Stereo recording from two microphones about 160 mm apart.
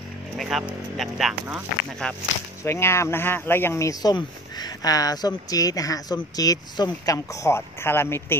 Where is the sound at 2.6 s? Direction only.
15° left (ahead or behind).